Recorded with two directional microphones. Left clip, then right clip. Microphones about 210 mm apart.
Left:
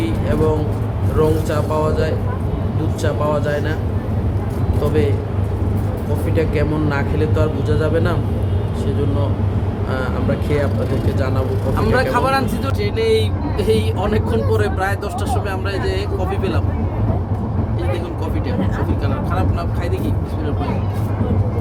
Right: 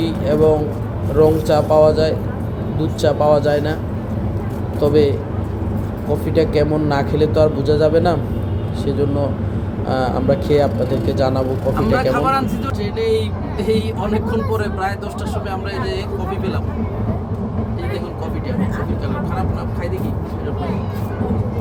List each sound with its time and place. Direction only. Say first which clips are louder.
0.0 s music: right 4 dB; 15° right (ahead or behind)
1.2 s speech: right 5 dB; 15° right (ahead or behind)
4.8 s speech: right 5 dB; 15° right (ahead or behind)
6.3 s speech: right 4 dB; 15° right (ahead or behind)
10.5 s speech: right 5 dB; 15° right (ahead or behind)
11.9 s speech: left 1 dB; centre (ahead or behind)